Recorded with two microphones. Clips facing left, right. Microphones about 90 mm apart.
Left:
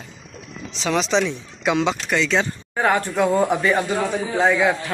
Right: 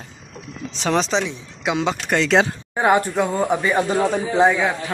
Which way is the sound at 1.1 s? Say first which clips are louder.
Left 2 dB; 15° right (ahead or behind).